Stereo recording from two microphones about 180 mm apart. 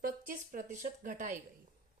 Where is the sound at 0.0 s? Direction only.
50° right (ahead or behind).